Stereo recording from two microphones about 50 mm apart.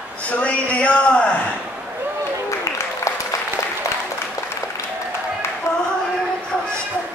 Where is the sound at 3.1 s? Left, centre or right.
Left.